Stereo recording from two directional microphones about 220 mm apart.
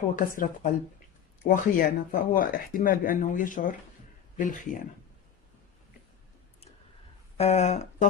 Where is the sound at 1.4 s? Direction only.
40° left (ahead or behind).